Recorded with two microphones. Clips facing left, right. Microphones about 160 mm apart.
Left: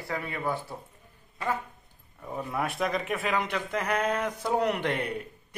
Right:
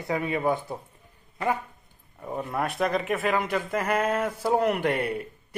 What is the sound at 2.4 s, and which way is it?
Speech, centre (ahead or behind).